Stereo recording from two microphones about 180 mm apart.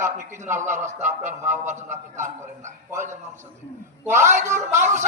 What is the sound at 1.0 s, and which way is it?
Speech, 40° right (ahead or behind).